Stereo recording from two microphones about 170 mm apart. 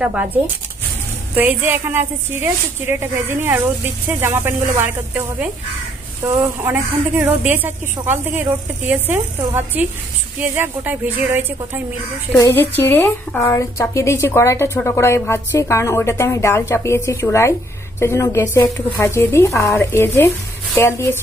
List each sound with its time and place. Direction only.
0.0 s a woman's voice: 10° right (ahead or behind)
12.4 s a woman's voice: 15° left (ahead or behind)